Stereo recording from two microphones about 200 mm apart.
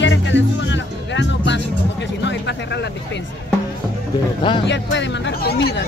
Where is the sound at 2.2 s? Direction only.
60° left (ahead or behind).